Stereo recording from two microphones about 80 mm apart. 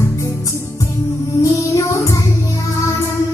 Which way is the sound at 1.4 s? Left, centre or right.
Left.